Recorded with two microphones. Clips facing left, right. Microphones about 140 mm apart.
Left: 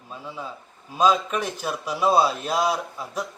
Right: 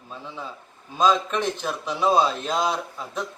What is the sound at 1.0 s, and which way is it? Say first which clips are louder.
A man's voice: even; 10° left (ahead or behind).